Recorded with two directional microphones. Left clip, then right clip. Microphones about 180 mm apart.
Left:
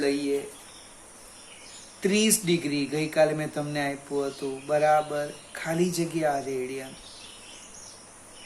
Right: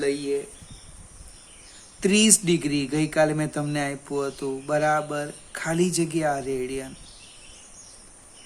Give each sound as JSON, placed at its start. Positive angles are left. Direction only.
{"t": 0.0, "sound": "speech", "side_deg": -40}
{"t": 2.0, "sound": "speech", "side_deg": -50}